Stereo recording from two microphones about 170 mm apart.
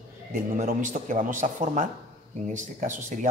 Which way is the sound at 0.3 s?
50° right (ahead or behind).